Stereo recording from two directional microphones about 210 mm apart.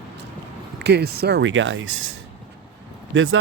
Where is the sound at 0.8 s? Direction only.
50° right (ahead or behind).